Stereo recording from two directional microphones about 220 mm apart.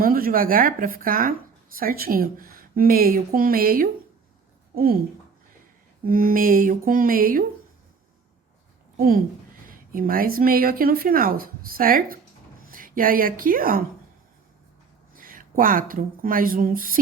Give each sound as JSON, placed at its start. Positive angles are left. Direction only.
{"t": 0.0, "sound": "a woman's voice", "side_deg": -40}
{"t": 6.1, "sound": "speech", "side_deg": -40}
{"t": 9.0, "sound": "a woman's voice", "side_deg": -40}
{"t": 15.1, "sound": "a woman's voice", "side_deg": -40}